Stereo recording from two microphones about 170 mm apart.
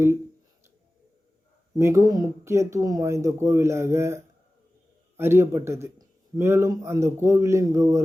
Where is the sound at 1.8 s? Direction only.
15° right (ahead or behind).